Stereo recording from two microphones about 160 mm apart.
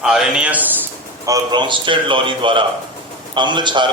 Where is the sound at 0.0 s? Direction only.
5° right (ahead or behind).